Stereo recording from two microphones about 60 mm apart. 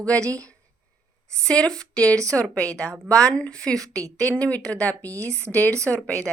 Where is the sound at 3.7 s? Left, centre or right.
Right.